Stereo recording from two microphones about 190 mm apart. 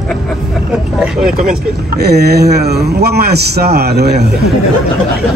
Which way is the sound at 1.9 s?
55° right (ahead or behind).